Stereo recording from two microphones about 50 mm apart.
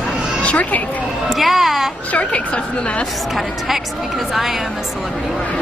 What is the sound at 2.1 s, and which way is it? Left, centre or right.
Speech, left.